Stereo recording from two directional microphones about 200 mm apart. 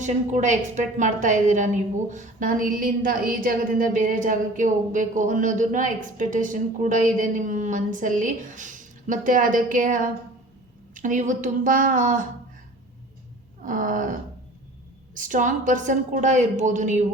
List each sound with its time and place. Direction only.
0.0 s a woman's voice: 35° right (ahead or behind)
13.6 s a woman's voice: 40° right (ahead or behind)